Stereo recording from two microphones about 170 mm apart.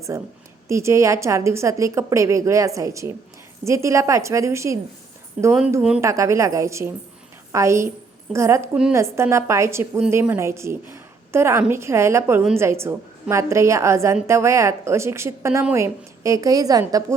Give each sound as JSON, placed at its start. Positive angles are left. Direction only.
{"t": 0.1, "sound": "a woman's voice", "side_deg": -15}
{"t": 6.0, "sound": "a woman's voice", "side_deg": -15}